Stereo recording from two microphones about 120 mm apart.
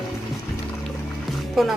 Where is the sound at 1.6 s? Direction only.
Centre (ahead or behind).